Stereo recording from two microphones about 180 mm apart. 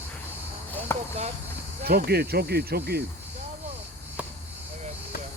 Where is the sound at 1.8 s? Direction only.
60° right (ahead or behind).